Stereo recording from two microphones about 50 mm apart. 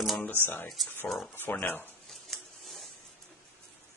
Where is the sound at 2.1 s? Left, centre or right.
Centre.